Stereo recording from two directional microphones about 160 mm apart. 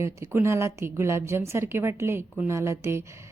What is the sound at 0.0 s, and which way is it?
A woman's voice, 15° right (ahead or behind).